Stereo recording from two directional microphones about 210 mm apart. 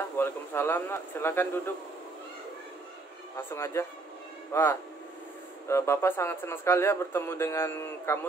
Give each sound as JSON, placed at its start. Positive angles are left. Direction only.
{"t": 0.2, "sound": "speech", "side_deg": 10}
{"t": 3.3, "sound": "speech", "side_deg": 10}